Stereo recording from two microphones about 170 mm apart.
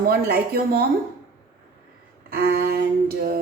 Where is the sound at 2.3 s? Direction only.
65° right (ahead or behind).